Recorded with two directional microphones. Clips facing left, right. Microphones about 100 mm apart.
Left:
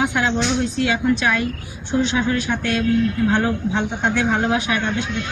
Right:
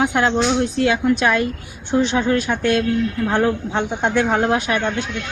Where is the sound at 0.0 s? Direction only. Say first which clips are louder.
Right 2 dB; 45° right (ahead or behind).